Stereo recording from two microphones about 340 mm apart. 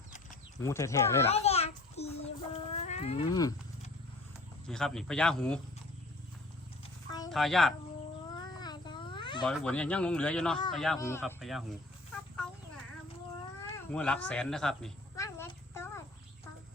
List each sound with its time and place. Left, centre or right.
0.6 s a child's voice: centre
2.8 s cat: centre
4.7 s speech: centre
7.3 s speech: centre
8.3 s a sound: centre
9.5 s speech: centre
13.7 s cat: centre